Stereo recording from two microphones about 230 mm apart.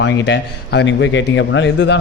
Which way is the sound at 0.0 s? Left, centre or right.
Left.